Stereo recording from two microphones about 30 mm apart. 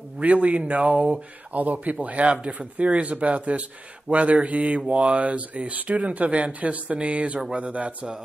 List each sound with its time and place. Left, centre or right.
0.2 s speech: right
1.5 s speech: right
2.0 s speech: right